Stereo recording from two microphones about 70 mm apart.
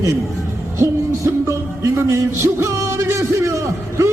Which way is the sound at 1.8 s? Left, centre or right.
Right.